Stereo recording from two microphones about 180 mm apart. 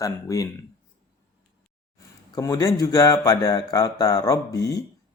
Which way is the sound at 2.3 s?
20° left (ahead or behind).